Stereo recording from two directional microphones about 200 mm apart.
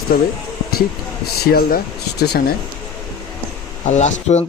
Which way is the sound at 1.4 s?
50° left (ahead or behind).